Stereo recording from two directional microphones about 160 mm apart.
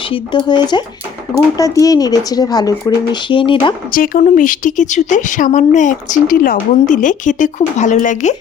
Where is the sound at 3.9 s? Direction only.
60° left (ahead or behind).